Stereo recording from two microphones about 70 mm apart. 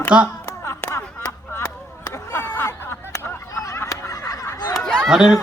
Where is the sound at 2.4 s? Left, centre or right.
Left.